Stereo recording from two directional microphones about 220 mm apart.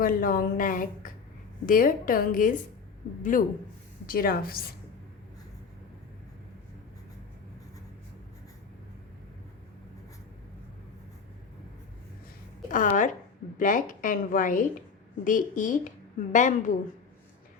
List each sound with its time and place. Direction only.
0.0 s a woman's voice: 40° left (ahead or behind)
12.7 s a woman's voice: 35° left (ahead or behind)